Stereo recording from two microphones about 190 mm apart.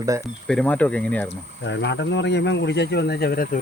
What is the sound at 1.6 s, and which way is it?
Speech, 70° left (ahead or behind).